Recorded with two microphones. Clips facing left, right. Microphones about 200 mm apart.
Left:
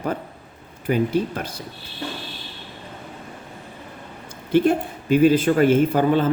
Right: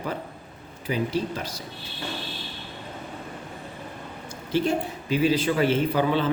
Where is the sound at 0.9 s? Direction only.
55° left (ahead or behind).